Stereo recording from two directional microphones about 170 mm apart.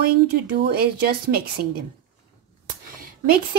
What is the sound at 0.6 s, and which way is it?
Speech, 70° right (ahead or behind).